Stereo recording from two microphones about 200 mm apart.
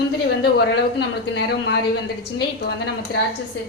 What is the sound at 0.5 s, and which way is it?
A woman's voice, 55° left (ahead or behind).